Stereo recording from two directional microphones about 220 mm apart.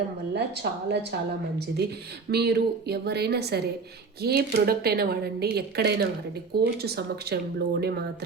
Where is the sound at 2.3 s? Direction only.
45° right (ahead or behind).